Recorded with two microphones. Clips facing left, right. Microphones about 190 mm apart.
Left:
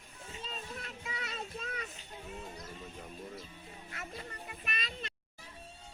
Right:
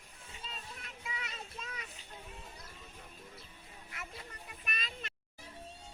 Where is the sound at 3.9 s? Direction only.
30° left (ahead or behind).